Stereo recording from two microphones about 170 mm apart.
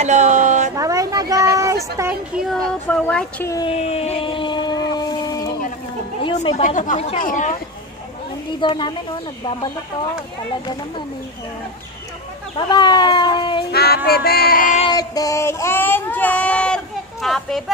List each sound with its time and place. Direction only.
0.0 s a sound: 45° right (ahead or behind)
0.7 s a sound: 20° right (ahead or behind)
2.0 s a woman's voice: 15° right (ahead or behind)
2.4 s speech: 5° left (ahead or behind)
3.4 s speech: 20° left (ahead or behind)
3.7 s a sound: 35° left (ahead or behind)
6.5 s speech: 45° left (ahead or behind)
8.5 s speech: 30° left (ahead or behind)
12.5 s speech: 25° left (ahead or behind)
13.7 s music: 65° left (ahead or behind)
14.9 s speech: 20° left (ahead or behind); by 17.6 s centre (ahead or behind)